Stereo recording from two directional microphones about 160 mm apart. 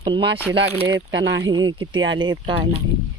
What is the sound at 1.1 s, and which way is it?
Speech, 90° right.